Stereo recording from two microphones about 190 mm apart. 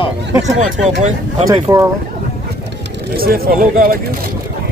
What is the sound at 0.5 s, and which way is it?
Speech, 40° right (ahead or behind).